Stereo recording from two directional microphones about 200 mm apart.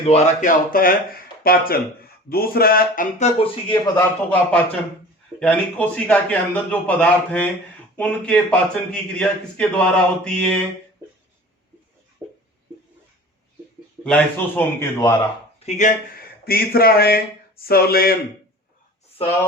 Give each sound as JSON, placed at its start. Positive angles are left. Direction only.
{"t": 0.0, "sound": "speech", "side_deg": 30}
{"t": 0.7, "sound": "speech", "side_deg": 45}
{"t": 3.9, "sound": "a man's voice", "side_deg": 10}
{"t": 12.2, "sound": "a sound", "side_deg": -10}
{"t": 14.0, "sound": "a man's voice", "side_deg": 10}
{"t": 15.6, "sound": "speech", "side_deg": 35}
{"t": 16.1, "sound": "speech", "side_deg": 50}